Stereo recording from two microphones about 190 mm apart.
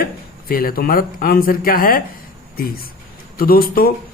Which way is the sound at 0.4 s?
50° left (ahead or behind).